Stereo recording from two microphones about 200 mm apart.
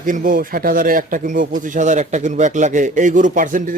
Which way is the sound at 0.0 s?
40° right (ahead or behind).